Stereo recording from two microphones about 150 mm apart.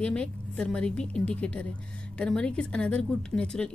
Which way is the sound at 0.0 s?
5° left (ahead or behind).